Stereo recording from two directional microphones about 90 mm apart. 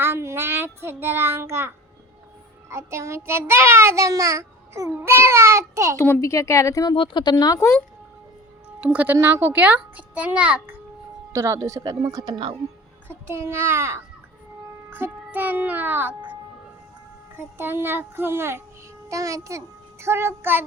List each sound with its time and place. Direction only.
0.0 s child singing: 30° right (ahead or behind)
6.0 s speech: 30° left (ahead or behind)
6.9 s speech: 65° left (ahead or behind); by 7.7 s 45° left (ahead or behind)
8.8 s a child's voice: 15° right (ahead or behind)
11.3 s speech: 35° right (ahead or behind)
11.8 s speech: 45° right (ahead or behind)
13.2 s child singing: 30° right (ahead or behind)
14.8 s a child's voice: 25° right (ahead or behind)
17.3 s child singing: 25° right (ahead or behind)
19.0 s a child's voice: 35° right (ahead or behind)